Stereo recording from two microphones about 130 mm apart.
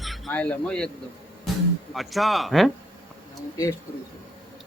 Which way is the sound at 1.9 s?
Centre (ahead or behind).